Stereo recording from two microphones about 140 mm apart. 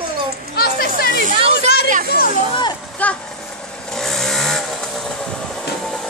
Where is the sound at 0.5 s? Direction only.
90° left.